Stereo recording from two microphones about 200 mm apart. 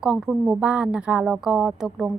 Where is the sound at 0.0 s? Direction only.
Centre (ahead or behind).